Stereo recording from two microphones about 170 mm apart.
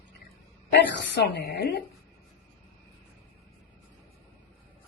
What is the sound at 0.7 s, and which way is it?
A woman's voice, 75° left (ahead or behind).